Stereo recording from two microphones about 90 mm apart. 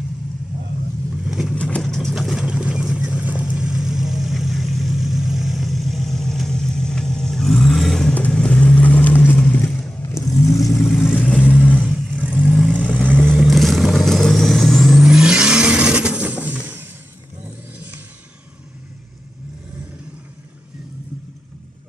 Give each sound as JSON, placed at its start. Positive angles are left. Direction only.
{"t": 1.1, "sound": "vehicle", "side_deg": -5}
{"t": 1.5, "sound": "vehicle", "side_deg": 15}
{"t": 10.0, "sound": "vehicle", "side_deg": 35}
{"t": 11.1, "sound": "vehicle", "side_deg": 15}
{"t": 11.9, "sound": "vehicle", "side_deg": 0}
{"t": 12.3, "sound": "vehicle", "side_deg": -10}
{"t": 13.2, "sound": "vehicle", "side_deg": 0}
{"t": 16.6, "sound": "a sound", "side_deg": -20}